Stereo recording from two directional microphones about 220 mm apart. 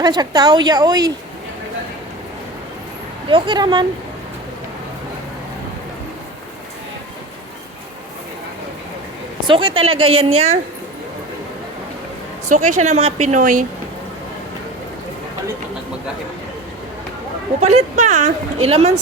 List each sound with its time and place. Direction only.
0.0 s a woman's voice: 20° right (ahead or behind)
3.2 s a woman's voice: 20° right (ahead or behind)
9.5 s a woman's voice: 25° right (ahead or behind)
12.5 s a woman's voice: 35° right (ahead or behind)
17.6 s a woman's voice: 30° right (ahead or behind)